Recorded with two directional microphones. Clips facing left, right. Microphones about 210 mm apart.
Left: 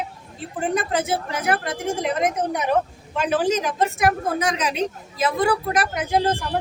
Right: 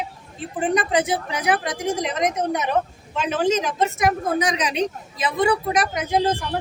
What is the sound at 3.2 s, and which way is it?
Speech, 10° left (ahead or behind).